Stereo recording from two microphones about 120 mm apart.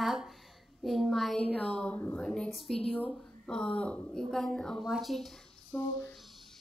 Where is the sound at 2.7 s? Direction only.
55° left (ahead or behind).